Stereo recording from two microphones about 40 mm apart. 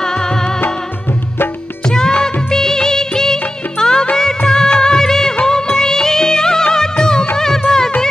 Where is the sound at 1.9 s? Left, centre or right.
Centre.